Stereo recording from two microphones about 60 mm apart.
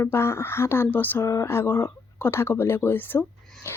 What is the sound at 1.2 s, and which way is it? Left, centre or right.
A woman's voice, left.